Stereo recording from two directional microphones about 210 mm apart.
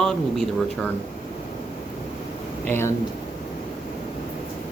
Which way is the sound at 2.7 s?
10° left (ahead or behind).